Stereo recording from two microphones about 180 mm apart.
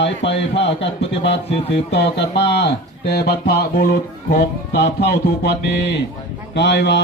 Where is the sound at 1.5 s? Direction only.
35° left (ahead or behind).